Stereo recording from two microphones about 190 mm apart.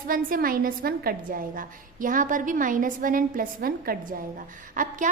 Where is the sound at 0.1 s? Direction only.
50° right (ahead or behind).